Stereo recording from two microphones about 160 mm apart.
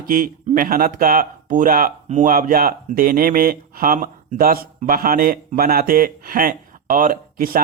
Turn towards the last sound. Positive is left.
turn(degrees=-65)  # may be behind; listen again after turning